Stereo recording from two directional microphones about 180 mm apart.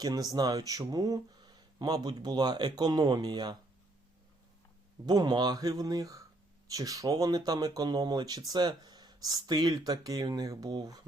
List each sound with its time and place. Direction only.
0.0 s speech: 20° right (ahead or behind)
5.0 s speech: 20° right (ahead or behind)